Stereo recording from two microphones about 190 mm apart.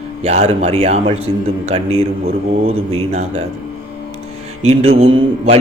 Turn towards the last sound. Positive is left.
turn(degrees=-30)  # may be behind; listen again after turning